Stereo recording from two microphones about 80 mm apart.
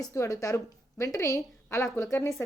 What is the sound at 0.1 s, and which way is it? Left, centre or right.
A woman's voice, left.